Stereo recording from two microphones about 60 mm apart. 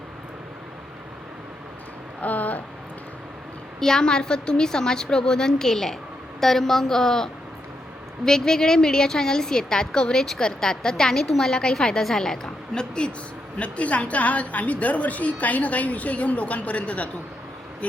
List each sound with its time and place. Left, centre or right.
2.2 s speech: left
3.8 s a woman's voice: centre